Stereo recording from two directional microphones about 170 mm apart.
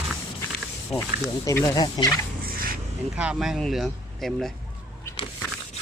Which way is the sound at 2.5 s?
60° right (ahead or behind).